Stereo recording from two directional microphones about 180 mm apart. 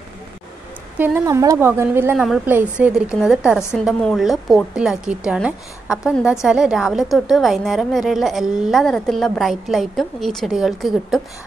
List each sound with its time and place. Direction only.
0.9 s a woman's voice: 10° right (ahead or behind)